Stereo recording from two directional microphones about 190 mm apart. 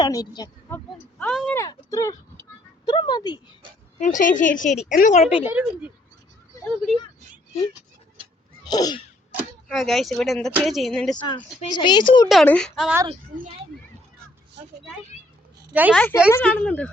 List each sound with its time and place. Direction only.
0.0 s speech: 20° left (ahead or behind)
1.2 s speech: 5° left (ahead or behind)
1.5 s speech: 15° left (ahead or behind)
3.9 s a woman's voice: 40° left (ahead or behind)
5.5 s speech: 5° right (ahead or behind)
8.6 s sneeze: 20° left (ahead or behind)
9.6 s speech: centre (ahead or behind)
11.7 s speech: 25° left (ahead or behind)
12.3 s speech: 5° left (ahead or behind)
15.7 s a woman's voice: 10° right (ahead or behind)
16.0 s speech: 10° left (ahead or behind)